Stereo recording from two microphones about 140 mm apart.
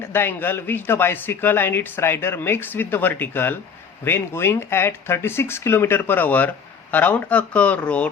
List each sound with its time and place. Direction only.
0.1 s speech: 15° left (ahead or behind)